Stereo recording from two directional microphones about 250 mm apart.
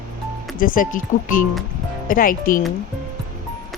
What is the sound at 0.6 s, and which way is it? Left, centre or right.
Speech, left.